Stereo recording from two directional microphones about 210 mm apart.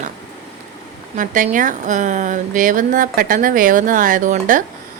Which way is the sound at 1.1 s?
35° right (ahead or behind).